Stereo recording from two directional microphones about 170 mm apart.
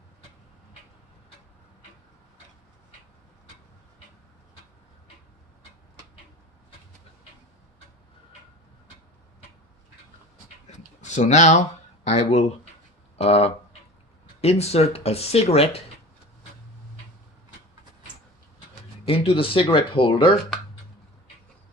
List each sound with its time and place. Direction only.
10.7 s a sound: 45° left (ahead or behind)
12.0 s speech: 40° left (ahead or behind)
19.0 s speech: 35° left (ahead or behind)